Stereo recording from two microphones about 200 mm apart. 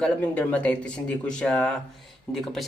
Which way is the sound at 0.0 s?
5° left (ahead or behind).